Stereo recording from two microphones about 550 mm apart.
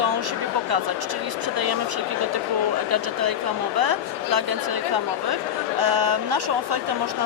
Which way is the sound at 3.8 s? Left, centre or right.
Right.